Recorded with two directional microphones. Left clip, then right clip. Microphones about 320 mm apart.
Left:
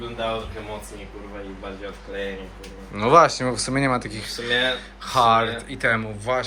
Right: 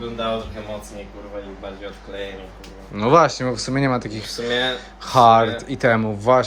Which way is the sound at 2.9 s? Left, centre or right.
Centre.